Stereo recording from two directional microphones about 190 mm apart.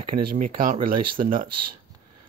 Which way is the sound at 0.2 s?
45° right (ahead or behind).